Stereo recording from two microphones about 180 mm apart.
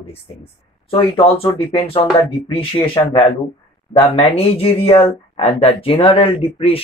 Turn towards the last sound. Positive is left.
turn(degrees=30)  # may be behind; listen again after turning